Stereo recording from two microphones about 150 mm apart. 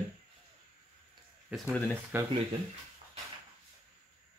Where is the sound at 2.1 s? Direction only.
15° right (ahead or behind).